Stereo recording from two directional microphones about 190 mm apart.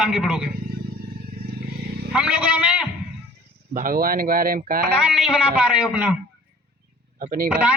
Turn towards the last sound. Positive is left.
turn(degrees=-5)  # may be behind; listen again after turning